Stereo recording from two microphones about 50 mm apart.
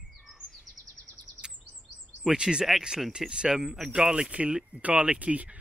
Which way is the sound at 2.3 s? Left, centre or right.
Centre.